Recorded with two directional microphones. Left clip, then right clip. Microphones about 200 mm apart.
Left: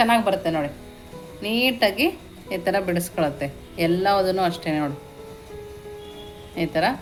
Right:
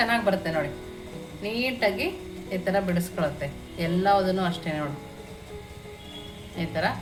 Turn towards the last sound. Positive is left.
turn(degrees=40)  # may be behind; listen again after turning